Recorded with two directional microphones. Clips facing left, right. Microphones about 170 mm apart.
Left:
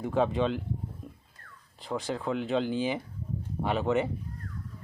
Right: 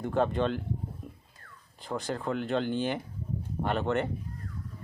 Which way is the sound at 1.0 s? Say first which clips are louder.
Even; centre (ahead or behind).